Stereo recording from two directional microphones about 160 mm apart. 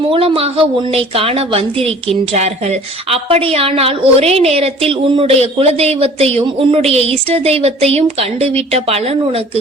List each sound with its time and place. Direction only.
0.1 s a woman's voice: 35° right (ahead or behind)